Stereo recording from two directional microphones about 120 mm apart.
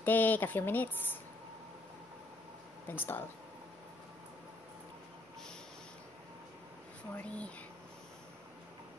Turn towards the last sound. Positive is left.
turn(degrees=10)  # may be behind; listen again after turning